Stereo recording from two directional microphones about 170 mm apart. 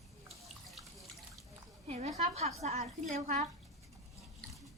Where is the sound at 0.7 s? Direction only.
Centre (ahead or behind).